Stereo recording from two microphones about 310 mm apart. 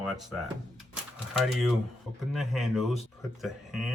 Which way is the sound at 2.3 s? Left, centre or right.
Centre.